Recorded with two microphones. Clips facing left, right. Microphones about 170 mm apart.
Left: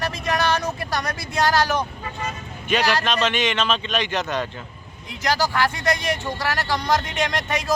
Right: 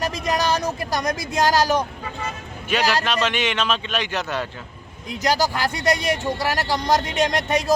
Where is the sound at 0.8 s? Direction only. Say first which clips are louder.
Right 3 dB; 20° right (ahead or behind).